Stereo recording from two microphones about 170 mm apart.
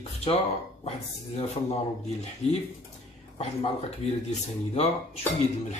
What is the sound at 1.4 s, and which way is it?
Speech, 40° left (ahead or behind).